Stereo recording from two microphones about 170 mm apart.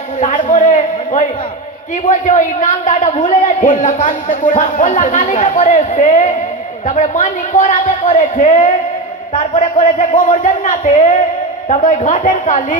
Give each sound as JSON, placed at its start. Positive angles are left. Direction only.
{"t": 0.2, "sound": "a man's voice", "side_deg": 45}